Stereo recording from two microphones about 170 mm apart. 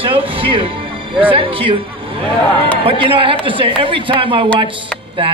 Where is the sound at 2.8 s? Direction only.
30° right (ahead or behind).